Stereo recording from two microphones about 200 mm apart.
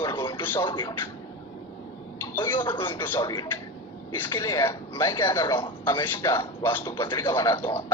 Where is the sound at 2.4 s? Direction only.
25° left (ahead or behind).